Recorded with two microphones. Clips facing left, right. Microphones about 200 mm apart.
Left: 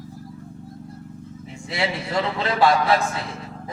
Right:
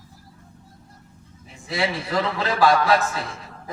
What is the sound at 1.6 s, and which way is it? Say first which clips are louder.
A man's voice: right 1 dB; 25° left (ahead or behind).